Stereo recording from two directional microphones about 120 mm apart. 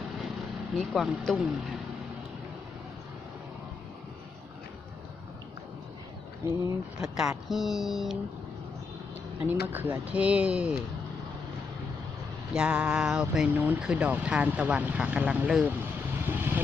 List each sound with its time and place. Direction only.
0.8 s speech: centre (ahead or behind)
6.4 s speech: 20° right (ahead or behind)
7.0 s speech: 5° right (ahead or behind)
9.5 s speech: 15° right (ahead or behind)
12.5 s speech: 10° right (ahead or behind)
16.2 s vehicle: 15° right (ahead or behind)